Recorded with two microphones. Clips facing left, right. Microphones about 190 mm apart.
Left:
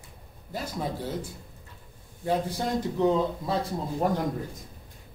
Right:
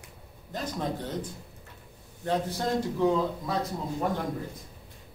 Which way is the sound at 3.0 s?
25° left (ahead or behind).